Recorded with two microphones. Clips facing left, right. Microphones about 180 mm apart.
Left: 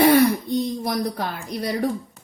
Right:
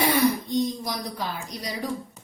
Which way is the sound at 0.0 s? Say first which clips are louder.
Left 6 dB; 60° left (ahead or behind).